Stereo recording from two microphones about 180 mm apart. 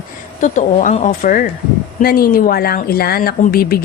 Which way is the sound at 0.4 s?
45° left (ahead or behind).